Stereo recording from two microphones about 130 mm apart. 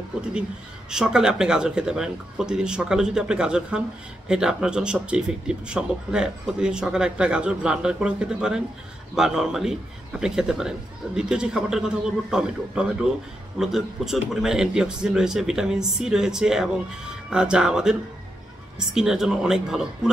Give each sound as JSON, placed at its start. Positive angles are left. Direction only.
{"t": 0.3, "sound": "speech", "side_deg": -5}
{"t": 18.9, "sound": "speech", "side_deg": -5}